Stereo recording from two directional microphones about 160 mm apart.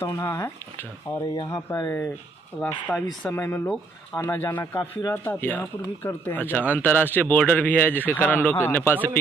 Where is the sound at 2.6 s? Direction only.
5° left (ahead or behind).